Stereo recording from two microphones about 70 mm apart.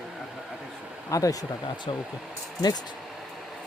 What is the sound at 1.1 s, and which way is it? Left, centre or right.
Speech, left.